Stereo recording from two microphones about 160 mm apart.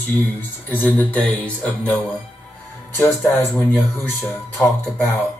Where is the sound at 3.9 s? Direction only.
15° left (ahead or behind).